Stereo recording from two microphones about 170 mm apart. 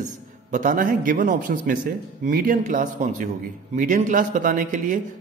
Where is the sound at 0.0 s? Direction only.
50° right (ahead or behind).